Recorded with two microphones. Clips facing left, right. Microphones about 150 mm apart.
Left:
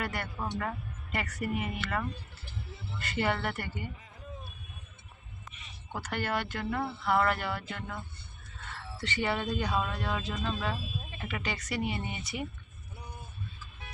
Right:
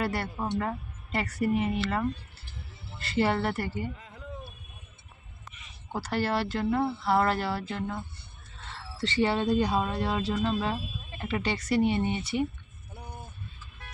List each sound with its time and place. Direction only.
0.0 s speech: 30° right (ahead or behind)
3.9 s a sound: 70° right (ahead or behind)
5.9 s speech: 30° right (ahead or behind)